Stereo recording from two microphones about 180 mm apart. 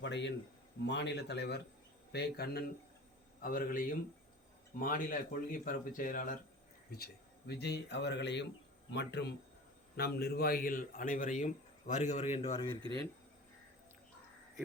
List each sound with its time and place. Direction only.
0.0 s speech: 80° left; by 2.6 s 60° left (ahead or behind)
3.4 s a man's voice: 50° left (ahead or behind)
6.9 s a man's voice: 60° left (ahead or behind); by 12.7 s 30° left (ahead or behind)